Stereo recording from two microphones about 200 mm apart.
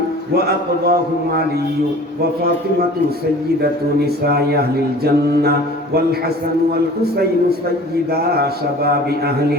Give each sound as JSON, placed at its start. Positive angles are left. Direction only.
{"t": 0.3, "sound": "mantra", "side_deg": -50}
{"t": 3.6, "sound": "mantra", "side_deg": -50}
{"t": 8.1, "sound": "mantra", "side_deg": -50}